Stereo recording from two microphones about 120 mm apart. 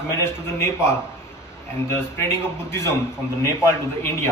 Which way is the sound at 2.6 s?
20° left (ahead or behind).